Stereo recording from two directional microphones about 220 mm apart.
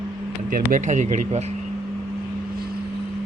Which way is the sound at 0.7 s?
35° right (ahead or behind).